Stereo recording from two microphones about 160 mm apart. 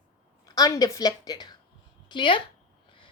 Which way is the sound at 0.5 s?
20° left (ahead or behind).